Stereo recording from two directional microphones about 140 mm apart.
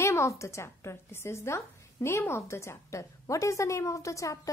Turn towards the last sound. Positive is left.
turn(degrees=20)  # may be behind; listen again after turning